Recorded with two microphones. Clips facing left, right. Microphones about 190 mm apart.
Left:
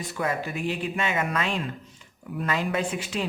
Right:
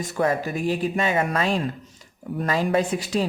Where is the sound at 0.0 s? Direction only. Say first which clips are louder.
Right 6 dB; 40° right (ahead or behind).